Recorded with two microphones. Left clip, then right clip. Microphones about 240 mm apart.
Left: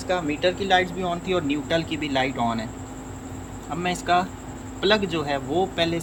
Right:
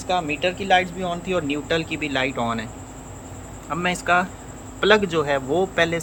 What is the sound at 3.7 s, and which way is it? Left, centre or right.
Speech, centre.